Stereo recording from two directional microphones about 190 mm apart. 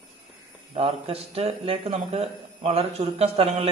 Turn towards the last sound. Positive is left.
turn(degrees=-30)  # may be behind; listen again after turning